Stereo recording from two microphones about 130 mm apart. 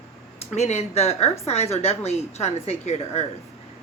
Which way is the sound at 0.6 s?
55° left (ahead or behind).